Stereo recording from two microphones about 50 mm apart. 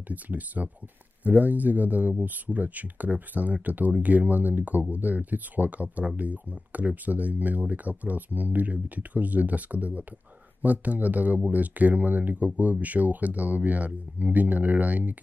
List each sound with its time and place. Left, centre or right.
0.1 s speech: right